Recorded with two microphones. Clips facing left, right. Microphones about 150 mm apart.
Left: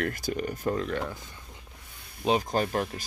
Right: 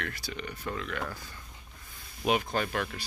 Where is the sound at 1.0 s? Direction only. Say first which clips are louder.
Left 3 dB; 20° left (ahead or behind).